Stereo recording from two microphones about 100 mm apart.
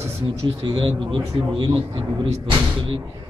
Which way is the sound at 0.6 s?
55° right (ahead or behind).